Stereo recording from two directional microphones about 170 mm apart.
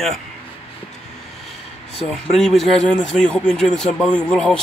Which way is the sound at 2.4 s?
Centre (ahead or behind).